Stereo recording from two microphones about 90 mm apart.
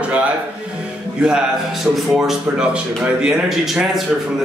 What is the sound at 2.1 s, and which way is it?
A man's voice, 5° right (ahead or behind).